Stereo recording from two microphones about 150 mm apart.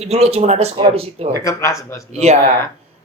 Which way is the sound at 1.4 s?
20° left (ahead or behind).